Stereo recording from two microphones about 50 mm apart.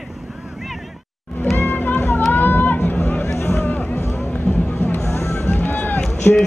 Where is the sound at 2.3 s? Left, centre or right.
Left.